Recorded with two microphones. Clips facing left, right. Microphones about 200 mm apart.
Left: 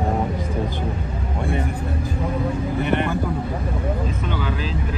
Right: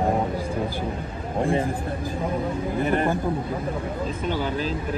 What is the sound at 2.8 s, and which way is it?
Speech, 35° right (ahead or behind).